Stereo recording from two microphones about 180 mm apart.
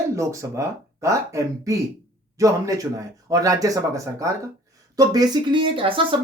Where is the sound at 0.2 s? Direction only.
15° right (ahead or behind).